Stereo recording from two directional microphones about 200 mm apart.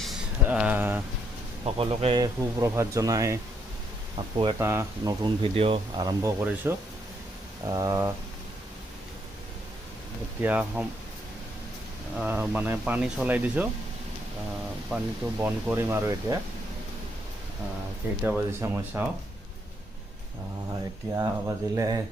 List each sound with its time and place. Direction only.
0.4 s speech: 5° right (ahead or behind)
1.6 s speech: 30° right (ahead or behind)
4.5 s speech: 15° right (ahead or behind)
6.2 s speech: 10° right (ahead or behind)
10.4 s speech: 5° right (ahead or behind)
12.1 s speech: 5° right (ahead or behind)
15.4 s speech: 10° right (ahead or behind)
18.2 s speech: 10° right (ahead or behind)
21.2 s speech: 15° right (ahead or behind)